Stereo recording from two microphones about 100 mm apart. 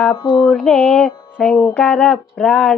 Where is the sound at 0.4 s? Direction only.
5° left (ahead or behind).